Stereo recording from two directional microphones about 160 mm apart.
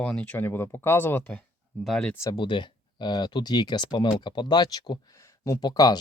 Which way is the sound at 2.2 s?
30° left (ahead or behind).